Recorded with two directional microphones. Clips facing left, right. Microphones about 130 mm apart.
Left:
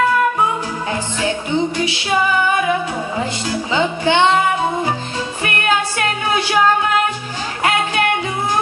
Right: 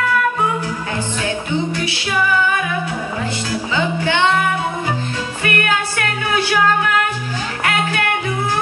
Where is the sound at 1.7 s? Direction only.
20° left (ahead or behind).